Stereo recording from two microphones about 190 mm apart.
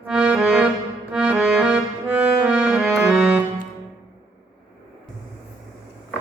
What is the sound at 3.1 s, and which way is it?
Music, 5° right (ahead or behind).